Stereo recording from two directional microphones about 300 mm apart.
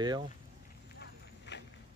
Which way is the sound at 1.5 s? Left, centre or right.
Left.